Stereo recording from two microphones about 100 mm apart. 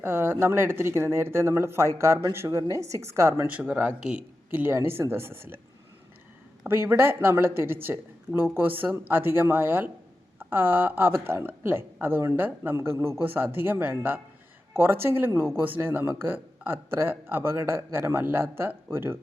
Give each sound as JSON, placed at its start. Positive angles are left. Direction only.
{"t": 0.0, "sound": "speech", "side_deg": -25}
{"t": 6.7, "sound": "speech", "side_deg": -25}